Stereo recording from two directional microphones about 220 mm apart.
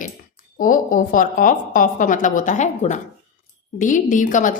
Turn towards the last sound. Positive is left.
turn(degrees=35)  # may be behind; listen again after turning